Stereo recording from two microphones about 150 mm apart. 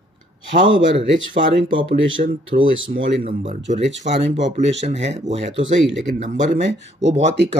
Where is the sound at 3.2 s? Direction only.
55° right (ahead or behind).